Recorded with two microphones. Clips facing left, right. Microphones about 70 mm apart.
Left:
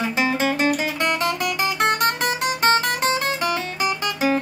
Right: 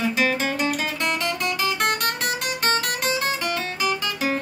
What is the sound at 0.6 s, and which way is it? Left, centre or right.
Music, left.